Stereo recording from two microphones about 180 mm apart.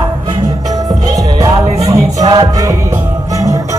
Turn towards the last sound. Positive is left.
turn(degrees=-20)  # may be behind; listen again after turning